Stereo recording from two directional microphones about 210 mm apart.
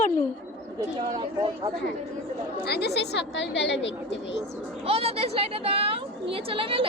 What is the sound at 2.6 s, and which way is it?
Speech, 50° left (ahead or behind).